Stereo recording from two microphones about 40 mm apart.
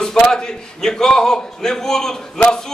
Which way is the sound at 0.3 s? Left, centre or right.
Centre.